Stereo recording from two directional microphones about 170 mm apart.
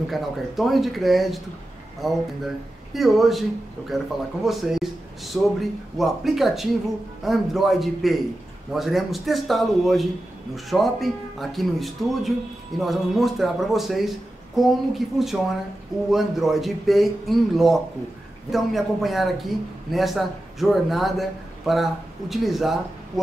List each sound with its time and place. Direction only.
0.1 s speech: centre (ahead or behind)